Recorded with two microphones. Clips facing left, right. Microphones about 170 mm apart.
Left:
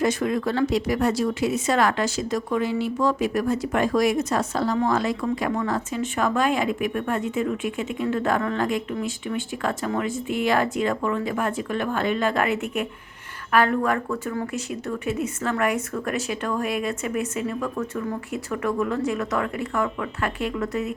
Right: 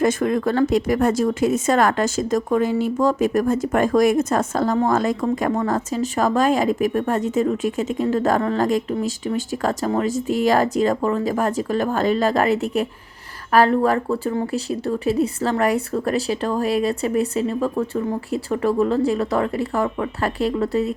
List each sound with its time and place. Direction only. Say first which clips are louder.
0.0 s speech: right 4 dB; 50° right (ahead or behind)